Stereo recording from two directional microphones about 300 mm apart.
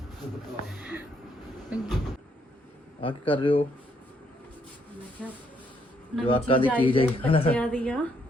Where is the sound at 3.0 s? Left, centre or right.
Centre.